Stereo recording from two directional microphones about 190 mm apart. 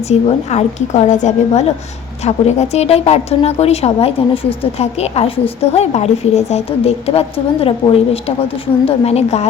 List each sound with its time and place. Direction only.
0.1 s a woman's voice: 35° left (ahead or behind)